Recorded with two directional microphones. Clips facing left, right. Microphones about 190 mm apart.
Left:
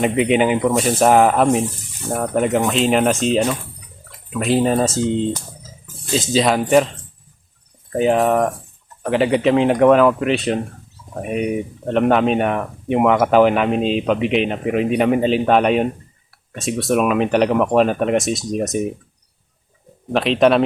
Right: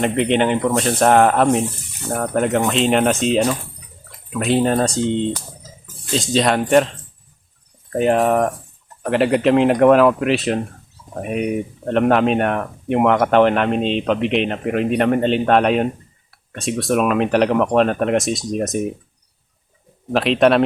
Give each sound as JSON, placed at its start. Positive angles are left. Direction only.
{"t": 0.0, "sound": "speech", "side_deg": 5}
{"t": 7.9, "sound": "speech", "side_deg": 0}
{"t": 20.1, "sound": "speech", "side_deg": 0}